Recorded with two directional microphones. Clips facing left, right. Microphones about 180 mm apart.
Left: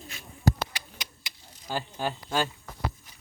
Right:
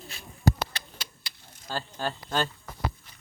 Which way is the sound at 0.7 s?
20° left (ahead or behind).